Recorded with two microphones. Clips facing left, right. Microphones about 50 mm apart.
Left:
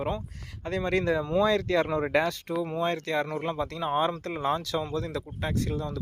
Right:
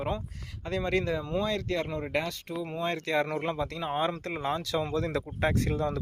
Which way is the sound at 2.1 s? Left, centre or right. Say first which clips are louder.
Left 5 dB; left.